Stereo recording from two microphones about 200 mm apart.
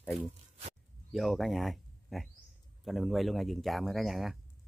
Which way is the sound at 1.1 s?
Centre (ahead or behind).